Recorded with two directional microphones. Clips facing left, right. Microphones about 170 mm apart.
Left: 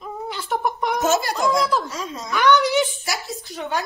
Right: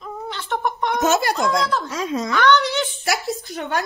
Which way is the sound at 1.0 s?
65° right (ahead or behind).